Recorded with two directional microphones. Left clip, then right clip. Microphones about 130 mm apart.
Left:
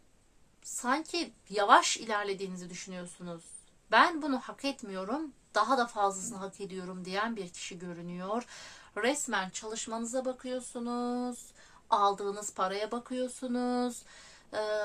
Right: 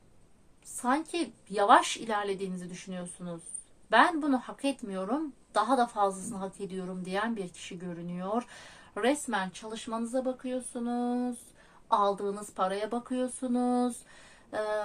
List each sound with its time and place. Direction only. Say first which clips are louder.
0.8 s a woman's voice: right 2 dB; 25° left (ahead or behind)